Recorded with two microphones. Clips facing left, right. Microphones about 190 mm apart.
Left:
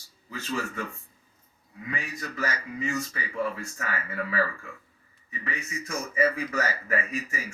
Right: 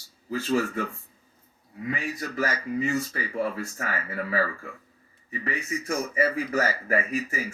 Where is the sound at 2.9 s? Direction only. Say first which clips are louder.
Right 4 dB; 35° right (ahead or behind).